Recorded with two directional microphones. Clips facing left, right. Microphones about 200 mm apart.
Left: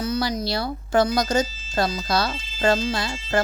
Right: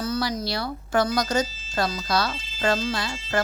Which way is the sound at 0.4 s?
25° left (ahead or behind).